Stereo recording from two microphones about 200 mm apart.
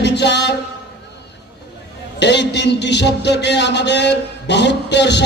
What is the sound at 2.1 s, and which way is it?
Speech, 60° left (ahead or behind).